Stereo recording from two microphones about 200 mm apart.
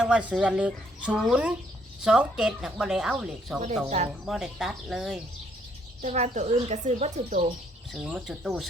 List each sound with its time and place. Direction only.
0.0 s speech: 5° right (ahead or behind)
3.8 s speech: 35° right (ahead or behind)
4.3 s speech: centre (ahead or behind)
6.0 s speech: 35° right (ahead or behind)
8.0 s speech: centre (ahead or behind)